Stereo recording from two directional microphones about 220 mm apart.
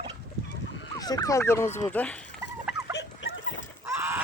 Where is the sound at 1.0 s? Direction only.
15° left (ahead or behind).